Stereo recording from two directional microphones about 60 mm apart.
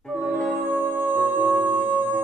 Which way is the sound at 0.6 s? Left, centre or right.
Right.